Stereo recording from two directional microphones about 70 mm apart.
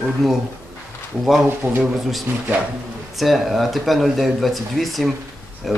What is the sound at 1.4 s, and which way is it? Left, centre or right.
Speech, centre.